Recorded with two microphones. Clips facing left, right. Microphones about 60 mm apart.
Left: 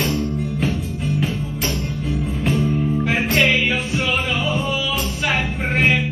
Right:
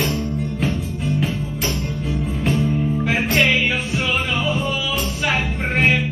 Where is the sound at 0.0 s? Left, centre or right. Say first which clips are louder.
Left 1 dB; centre.